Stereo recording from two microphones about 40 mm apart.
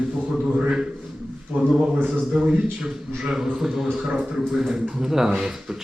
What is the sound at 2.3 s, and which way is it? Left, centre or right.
Speech, centre.